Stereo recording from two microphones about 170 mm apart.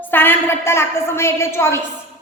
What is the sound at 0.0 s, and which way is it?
A woman's voice, 10° left (ahead or behind).